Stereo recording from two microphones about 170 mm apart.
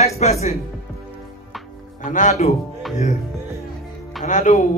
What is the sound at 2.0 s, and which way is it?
Speech, 45° left (ahead or behind).